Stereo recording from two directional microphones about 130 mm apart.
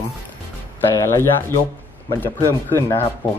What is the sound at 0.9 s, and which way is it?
Speech, 20° left (ahead or behind).